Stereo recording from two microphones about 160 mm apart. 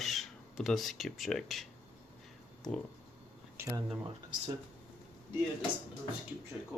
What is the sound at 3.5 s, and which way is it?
Speech, 20° right (ahead or behind).